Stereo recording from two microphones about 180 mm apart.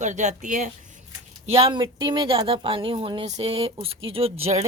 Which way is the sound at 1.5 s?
30° right (ahead or behind).